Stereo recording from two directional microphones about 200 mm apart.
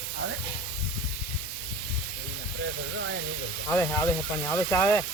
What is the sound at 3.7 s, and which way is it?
Speech, 10° left (ahead or behind).